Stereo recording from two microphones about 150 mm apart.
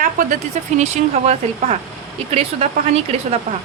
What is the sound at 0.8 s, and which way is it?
Speech, 45° right (ahead or behind).